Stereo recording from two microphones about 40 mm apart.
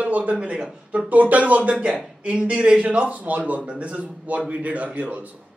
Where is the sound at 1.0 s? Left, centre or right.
Right.